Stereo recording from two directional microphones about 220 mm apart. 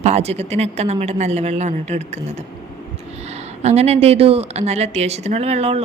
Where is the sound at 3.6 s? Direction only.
30° right (ahead or behind).